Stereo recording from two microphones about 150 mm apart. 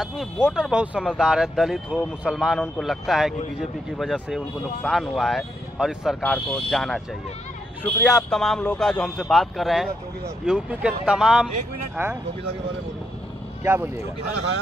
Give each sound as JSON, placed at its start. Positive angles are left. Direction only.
{"t": 0.0, "sound": "speech", "side_deg": 0}
{"t": 8.0, "sound": "speech", "side_deg": 20}
{"t": 8.3, "sound": "speech", "side_deg": 5}
{"t": 13.7, "sound": "speech", "side_deg": -15}